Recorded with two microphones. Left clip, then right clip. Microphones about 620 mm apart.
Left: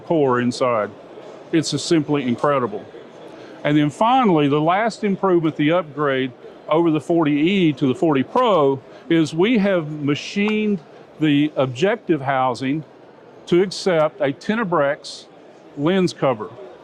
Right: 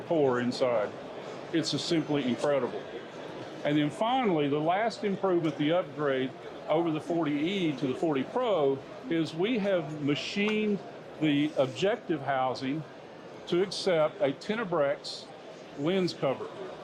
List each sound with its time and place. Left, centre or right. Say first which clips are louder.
0.1 s speech: left 9 dB; left